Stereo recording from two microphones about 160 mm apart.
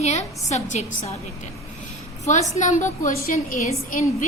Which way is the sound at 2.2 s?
45° left (ahead or behind).